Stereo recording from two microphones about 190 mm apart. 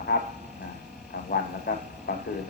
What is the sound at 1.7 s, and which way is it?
Speech, 60° left (ahead or behind).